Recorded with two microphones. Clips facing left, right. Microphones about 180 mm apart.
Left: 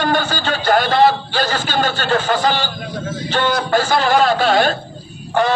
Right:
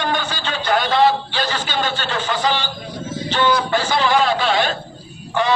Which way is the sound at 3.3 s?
45° left (ahead or behind).